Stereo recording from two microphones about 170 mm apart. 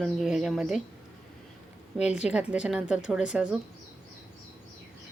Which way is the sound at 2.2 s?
5° right (ahead or behind).